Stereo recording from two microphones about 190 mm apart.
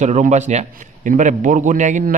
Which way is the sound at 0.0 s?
40° right (ahead or behind).